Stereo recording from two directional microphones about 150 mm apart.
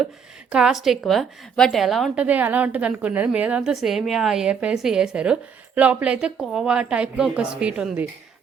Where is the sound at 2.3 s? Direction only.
10° right (ahead or behind).